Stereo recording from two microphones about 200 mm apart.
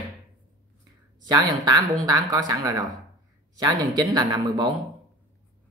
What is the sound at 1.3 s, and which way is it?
Speech, 20° right (ahead or behind).